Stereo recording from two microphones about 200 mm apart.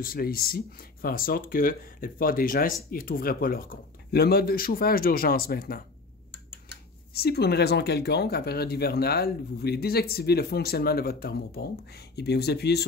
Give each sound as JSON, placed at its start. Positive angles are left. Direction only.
{"t": 0.0, "sound": "speech", "side_deg": 45}
{"t": 7.2, "sound": "speech", "side_deg": 55}